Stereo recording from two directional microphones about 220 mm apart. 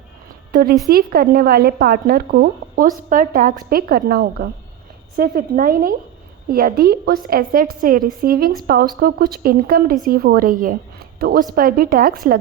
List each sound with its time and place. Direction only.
0.5 s a woman's voice: 40° right (ahead or behind)